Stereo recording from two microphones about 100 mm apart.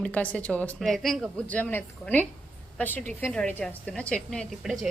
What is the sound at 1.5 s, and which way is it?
A woman's voice, 20° left (ahead or behind).